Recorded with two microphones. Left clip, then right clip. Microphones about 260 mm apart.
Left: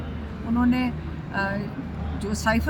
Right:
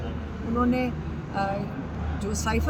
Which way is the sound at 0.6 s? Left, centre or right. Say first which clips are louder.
Left 3 dB; centre.